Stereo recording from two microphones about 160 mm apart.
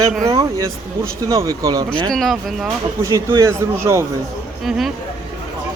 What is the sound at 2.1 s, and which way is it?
Speech, centre (ahead or behind).